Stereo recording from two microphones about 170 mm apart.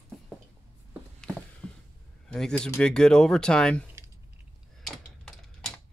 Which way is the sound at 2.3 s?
5° left (ahead or behind).